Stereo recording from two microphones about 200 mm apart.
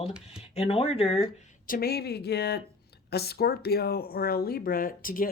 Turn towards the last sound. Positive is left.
turn(degrees=45)  # may be behind; listen again after turning